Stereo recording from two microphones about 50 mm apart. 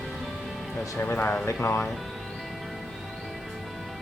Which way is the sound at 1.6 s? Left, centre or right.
Left.